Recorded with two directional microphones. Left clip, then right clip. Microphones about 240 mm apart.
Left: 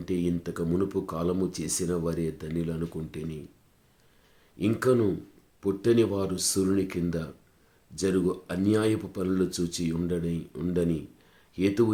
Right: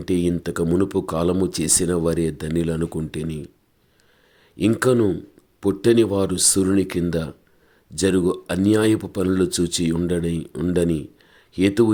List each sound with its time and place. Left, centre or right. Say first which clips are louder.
0.0 s speech: right 8 dB; right
4.5 s speech: right 6 dB; right